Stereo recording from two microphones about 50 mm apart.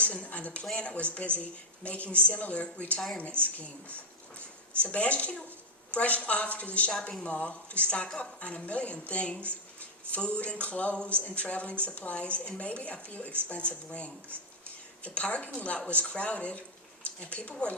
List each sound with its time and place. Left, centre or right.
0.0 s a woman's voice: left